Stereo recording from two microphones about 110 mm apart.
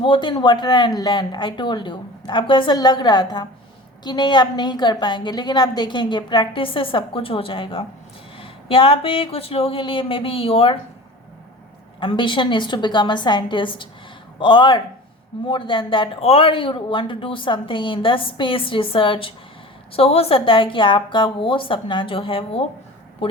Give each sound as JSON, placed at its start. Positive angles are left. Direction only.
{"t": 0.0, "sound": "speech", "side_deg": 50}
{"t": 11.9, "sound": "speech", "side_deg": 50}
{"t": 20.0, "sound": "speech", "side_deg": 60}